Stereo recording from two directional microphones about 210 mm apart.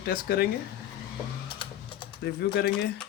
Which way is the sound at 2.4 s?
50° left (ahead or behind).